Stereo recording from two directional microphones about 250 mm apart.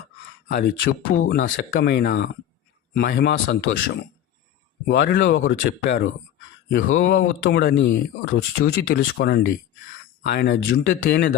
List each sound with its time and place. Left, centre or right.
0.4 s speech: left
4.9 s speech: left